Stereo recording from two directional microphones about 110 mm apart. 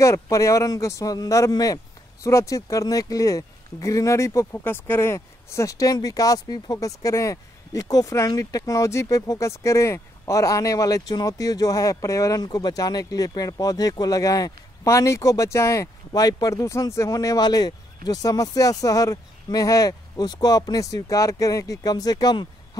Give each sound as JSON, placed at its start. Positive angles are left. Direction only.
{"t": 0.0, "sound": "speech", "side_deg": 30}